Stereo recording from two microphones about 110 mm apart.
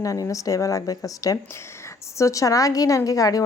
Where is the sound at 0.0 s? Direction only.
30° left (ahead or behind).